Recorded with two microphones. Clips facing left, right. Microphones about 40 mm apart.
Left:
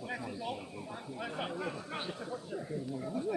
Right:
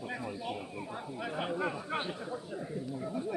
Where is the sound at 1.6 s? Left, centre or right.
Right.